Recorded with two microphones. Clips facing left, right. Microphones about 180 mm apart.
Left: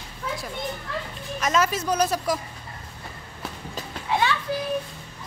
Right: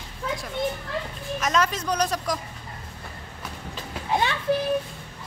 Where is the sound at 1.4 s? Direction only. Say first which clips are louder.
Left 1 dB; 5° left (ahead or behind).